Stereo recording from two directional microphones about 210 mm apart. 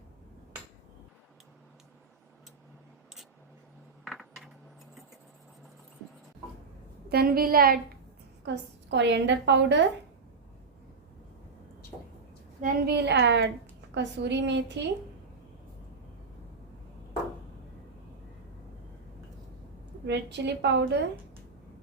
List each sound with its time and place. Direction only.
4.0 s coin: centre (ahead or behind)
7.1 s a woman's voice: 45° right (ahead or behind)
8.4 s a woman's voice: 55° right (ahead or behind)
12.6 s a woman's voice: 50° right (ahead or behind)
20.1 s a woman's voice: 55° right (ahead or behind)